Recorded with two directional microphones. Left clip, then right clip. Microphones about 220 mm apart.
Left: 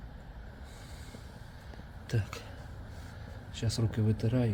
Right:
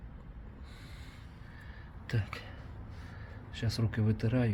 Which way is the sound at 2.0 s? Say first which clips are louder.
Left 1 dB; 20° left (ahead or behind).